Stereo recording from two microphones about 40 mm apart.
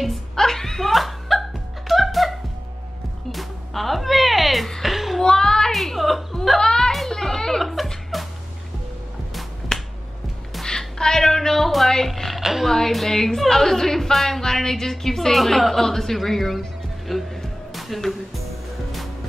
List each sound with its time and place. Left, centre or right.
0.0 s a sound: centre
1.9 s music: centre
4.8 s a sound: centre
5.2 s child singing: centre
5.7 s whimper: centre
6.6 s a sound: centre
7.7 s music: centre
9.7 s finger snapping: centre
10.6 s music: centre
12.4 s a sound: centre
12.6 s a woman's voice: centre
17.1 s music: centre